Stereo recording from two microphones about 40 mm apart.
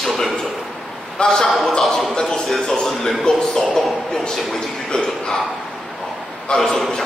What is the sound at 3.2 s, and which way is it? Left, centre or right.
Speech, centre.